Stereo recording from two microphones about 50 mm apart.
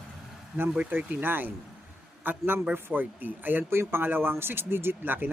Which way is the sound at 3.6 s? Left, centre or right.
Right.